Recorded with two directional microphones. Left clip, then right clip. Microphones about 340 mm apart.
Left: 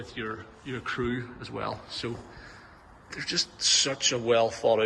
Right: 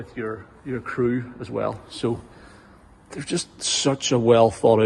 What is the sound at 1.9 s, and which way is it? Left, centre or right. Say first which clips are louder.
Speech: right 8 dB; centre.